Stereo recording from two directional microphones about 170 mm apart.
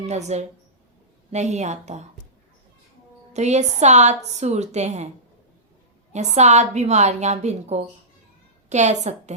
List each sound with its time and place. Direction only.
0.0 s a woman's voice: 40° right (ahead or behind)
3.3 s a woman's voice: 40° right (ahead or behind)
6.1 s a woman's voice: 40° right (ahead or behind)